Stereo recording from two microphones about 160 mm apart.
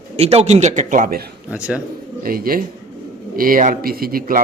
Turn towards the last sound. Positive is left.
turn(degrees=-60)  # may be behind; listen again after turning